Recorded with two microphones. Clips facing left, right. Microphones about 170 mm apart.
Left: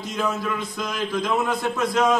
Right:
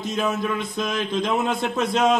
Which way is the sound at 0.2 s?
20° right (ahead or behind).